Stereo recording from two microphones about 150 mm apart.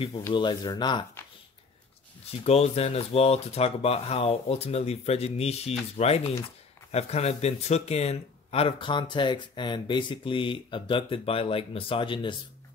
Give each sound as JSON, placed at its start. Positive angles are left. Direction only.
{"t": 0.3, "sound": "speech", "side_deg": 30}
{"t": 2.4, "sound": "speech", "side_deg": 45}